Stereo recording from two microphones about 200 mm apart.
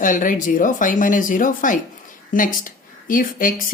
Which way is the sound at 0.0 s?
40° left (ahead or behind).